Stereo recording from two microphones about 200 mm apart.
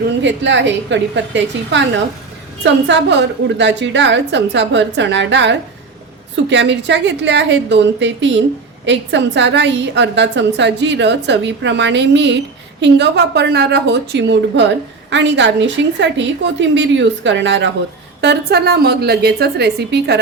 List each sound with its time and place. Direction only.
0.2 s a woman's voice: 65° right (ahead or behind)
2.8 s a woman's voice: 60° right (ahead or behind)